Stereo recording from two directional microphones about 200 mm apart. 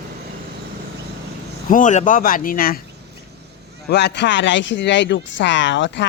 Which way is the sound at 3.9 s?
60° left (ahead or behind).